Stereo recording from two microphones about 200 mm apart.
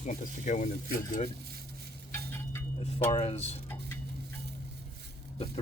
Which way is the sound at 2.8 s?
30° left (ahead or behind).